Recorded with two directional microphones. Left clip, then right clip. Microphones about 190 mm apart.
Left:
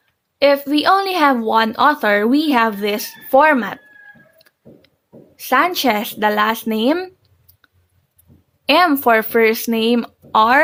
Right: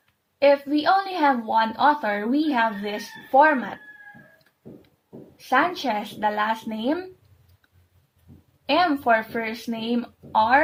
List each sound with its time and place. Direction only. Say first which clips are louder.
0.3 s speech: left 4 dB; 60° left (ahead or behind)
5.5 s speech: left 7 dB; 55° left (ahead or behind)
8.6 s speech: left 7 dB; 55° left (ahead or behind)